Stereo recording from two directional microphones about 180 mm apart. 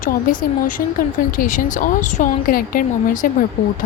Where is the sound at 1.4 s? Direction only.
45° left (ahead or behind).